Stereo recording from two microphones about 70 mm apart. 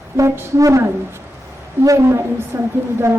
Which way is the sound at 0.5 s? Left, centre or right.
Right.